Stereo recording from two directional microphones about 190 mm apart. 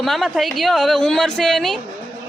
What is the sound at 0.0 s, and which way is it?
A man's voice, centre (ahead or behind).